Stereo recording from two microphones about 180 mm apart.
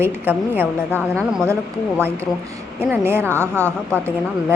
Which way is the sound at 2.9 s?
10° right (ahead or behind).